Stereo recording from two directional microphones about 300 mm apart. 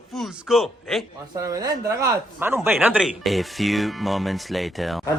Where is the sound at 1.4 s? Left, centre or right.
Centre.